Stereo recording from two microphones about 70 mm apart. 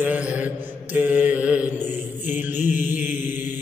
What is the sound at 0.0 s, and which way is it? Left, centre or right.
Mantra, right.